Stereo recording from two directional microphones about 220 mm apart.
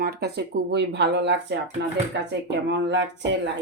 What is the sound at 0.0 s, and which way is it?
Speech, 45° right (ahead or behind).